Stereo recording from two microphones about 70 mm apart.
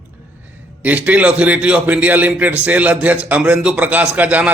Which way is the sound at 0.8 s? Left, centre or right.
Right.